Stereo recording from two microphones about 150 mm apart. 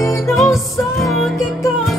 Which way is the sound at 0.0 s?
20° left (ahead or behind).